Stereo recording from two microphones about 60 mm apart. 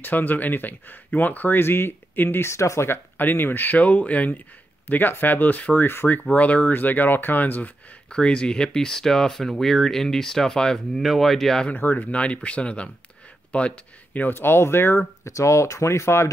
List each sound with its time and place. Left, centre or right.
0.0 s speech: left
3.2 s speech: left
8.1 s speech: centre
11.0 s speech: centre
11.7 s speech: left
12.1 s speech: centre
14.3 s speech: left
15.2 s speech: left